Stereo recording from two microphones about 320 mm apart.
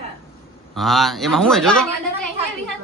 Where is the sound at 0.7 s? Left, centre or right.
Centre.